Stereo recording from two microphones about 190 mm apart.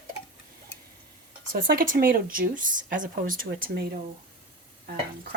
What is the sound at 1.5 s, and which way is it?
Speech, 50° right (ahead or behind).